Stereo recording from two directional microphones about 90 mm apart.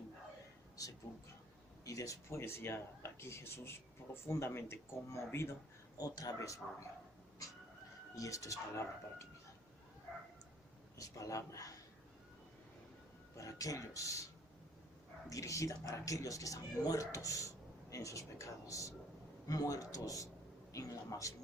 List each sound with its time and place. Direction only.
1.8 s speech: 40° left (ahead or behind)
6.0 s speech: 45° left (ahead or behind)
8.1 s speech: 40° left (ahead or behind)
10.9 s speech: 40° left (ahead or behind)
13.3 s speech: 40° left (ahead or behind)
15.3 s speech: 35° left (ahead or behind)